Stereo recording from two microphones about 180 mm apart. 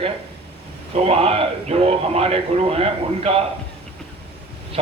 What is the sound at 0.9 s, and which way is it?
A man's voice, 35° right (ahead or behind).